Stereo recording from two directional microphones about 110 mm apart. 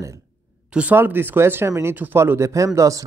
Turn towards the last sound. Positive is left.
turn(degrees=-30)  # may be behind; listen again after turning